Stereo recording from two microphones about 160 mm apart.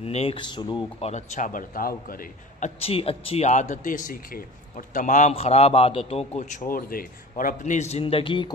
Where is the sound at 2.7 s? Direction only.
35° left (ahead or behind).